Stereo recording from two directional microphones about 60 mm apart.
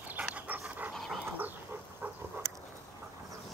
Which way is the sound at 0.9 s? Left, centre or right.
Centre.